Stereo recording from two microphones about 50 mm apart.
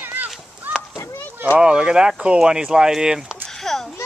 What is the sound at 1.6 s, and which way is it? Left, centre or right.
Speech, centre.